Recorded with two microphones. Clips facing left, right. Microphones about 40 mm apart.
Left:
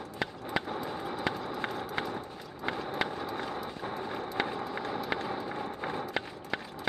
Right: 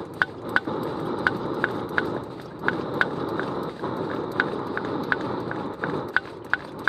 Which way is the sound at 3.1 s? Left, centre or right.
Centre.